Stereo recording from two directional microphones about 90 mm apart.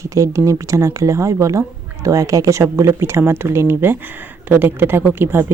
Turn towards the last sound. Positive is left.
turn(degrees=-25)  # may be behind; listen again after turning